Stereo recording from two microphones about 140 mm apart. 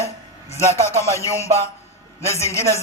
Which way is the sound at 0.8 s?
20° left (ahead or behind).